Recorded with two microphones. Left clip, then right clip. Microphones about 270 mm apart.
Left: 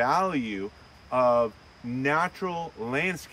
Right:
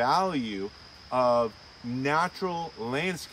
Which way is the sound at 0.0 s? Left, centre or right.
Centre.